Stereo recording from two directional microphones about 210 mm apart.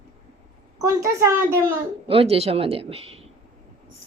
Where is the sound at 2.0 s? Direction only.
25° right (ahead or behind).